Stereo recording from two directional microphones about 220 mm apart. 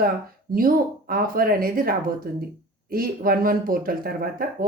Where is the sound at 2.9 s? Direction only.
40° right (ahead or behind).